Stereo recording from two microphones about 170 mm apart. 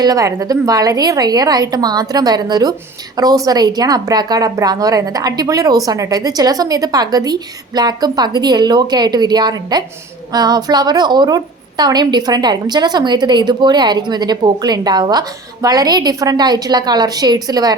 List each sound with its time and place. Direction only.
0.0 s speech: 20° right (ahead or behind)